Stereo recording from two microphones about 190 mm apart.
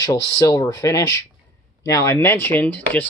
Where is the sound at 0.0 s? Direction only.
20° left (ahead or behind).